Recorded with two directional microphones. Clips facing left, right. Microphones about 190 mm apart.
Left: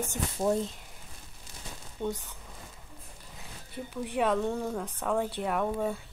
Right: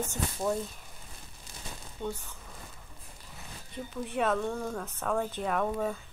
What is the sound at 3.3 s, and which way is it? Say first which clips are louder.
Zipper: even; 10° left (ahead or behind).